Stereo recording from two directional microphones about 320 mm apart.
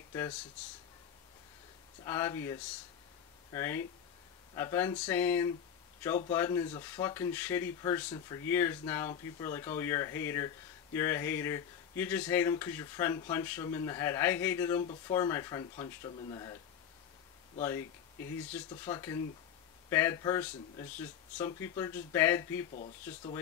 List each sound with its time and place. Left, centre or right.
0.1 s speech: centre
2.0 s speech: centre
17.6 s speech: centre
22.7 s speech: left
23.0 s speech: centre